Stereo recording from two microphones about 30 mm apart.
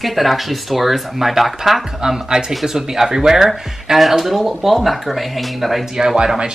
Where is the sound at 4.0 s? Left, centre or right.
Centre.